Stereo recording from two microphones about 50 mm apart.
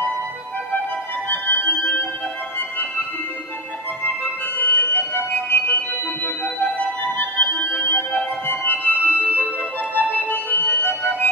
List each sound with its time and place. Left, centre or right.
1.3 s music: left
4.0 s music: left